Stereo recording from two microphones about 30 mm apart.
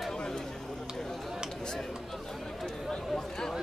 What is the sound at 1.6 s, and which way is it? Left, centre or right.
Speech, left.